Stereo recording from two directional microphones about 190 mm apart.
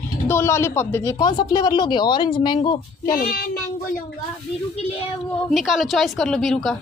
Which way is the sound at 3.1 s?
50° left (ahead or behind).